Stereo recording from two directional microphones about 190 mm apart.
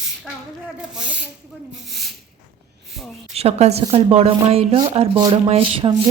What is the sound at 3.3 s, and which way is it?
Speech, 35° right (ahead or behind).